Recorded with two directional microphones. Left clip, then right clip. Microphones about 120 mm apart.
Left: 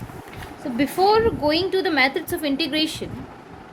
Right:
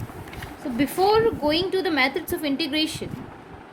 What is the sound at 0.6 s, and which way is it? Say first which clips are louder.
A woman's voice: left 2 dB; 10° left (ahead or behind).